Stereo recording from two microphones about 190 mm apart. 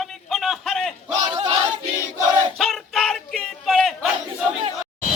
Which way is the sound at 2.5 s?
Centre (ahead or behind).